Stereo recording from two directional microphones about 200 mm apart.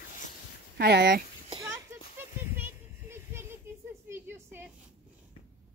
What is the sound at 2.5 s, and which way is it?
Child singing, 10° right (ahead or behind).